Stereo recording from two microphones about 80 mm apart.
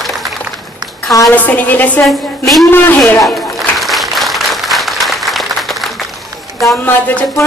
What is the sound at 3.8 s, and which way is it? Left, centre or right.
Applause, centre.